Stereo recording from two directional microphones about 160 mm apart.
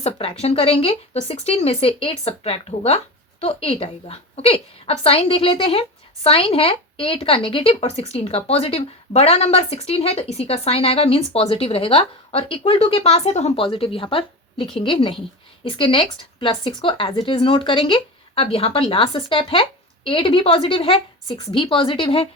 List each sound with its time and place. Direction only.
0.0 s speech: 40° left (ahead or behind)